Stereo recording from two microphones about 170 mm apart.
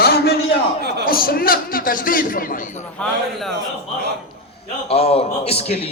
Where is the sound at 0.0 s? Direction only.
65° left (ahead or behind).